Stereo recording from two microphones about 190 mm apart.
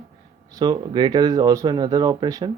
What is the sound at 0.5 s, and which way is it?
Speech, 20° right (ahead or behind).